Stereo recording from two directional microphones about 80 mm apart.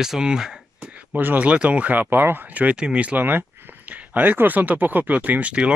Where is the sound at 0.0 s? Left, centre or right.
Centre.